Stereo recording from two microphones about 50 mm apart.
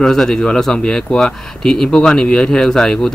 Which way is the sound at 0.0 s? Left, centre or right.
Centre.